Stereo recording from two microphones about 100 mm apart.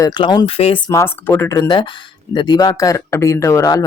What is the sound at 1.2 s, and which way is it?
Speech, 20° left (ahead or behind).